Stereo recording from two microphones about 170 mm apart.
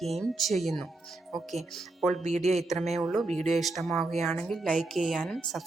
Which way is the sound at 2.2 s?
40° right (ahead or behind).